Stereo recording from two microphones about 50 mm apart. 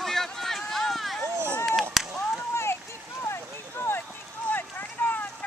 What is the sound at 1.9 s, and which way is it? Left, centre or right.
Chop, centre.